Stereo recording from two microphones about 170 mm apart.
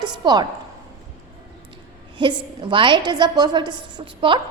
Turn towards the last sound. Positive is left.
turn(degrees=-30)  # may be behind; listen again after turning